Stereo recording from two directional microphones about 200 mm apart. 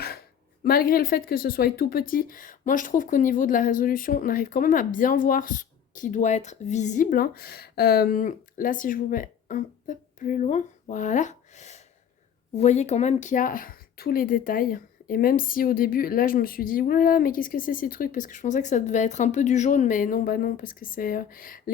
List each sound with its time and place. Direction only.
0.6 s speech: 45° left (ahead or behind)